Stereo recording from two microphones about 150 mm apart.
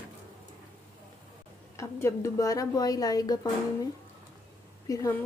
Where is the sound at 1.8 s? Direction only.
20° left (ahead or behind).